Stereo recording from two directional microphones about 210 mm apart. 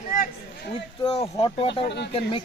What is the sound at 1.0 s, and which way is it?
Speech, 25° left (ahead or behind).